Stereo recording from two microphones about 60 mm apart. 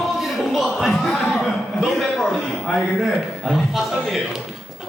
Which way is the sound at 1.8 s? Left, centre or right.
Centre.